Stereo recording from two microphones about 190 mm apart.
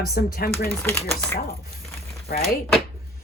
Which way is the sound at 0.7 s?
10° left (ahead or behind).